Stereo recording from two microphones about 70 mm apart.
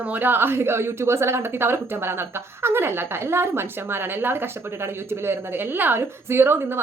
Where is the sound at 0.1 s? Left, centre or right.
Right.